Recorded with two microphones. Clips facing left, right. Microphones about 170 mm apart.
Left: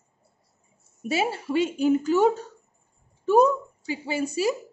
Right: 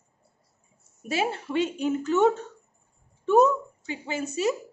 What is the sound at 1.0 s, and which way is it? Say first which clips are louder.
A woman's voice: left 2 dB; 5° left (ahead or behind).